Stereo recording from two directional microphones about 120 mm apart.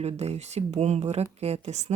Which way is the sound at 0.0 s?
65° right (ahead or behind).